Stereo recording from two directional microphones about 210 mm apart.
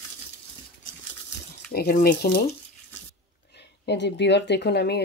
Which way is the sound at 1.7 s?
45° left (ahead or behind).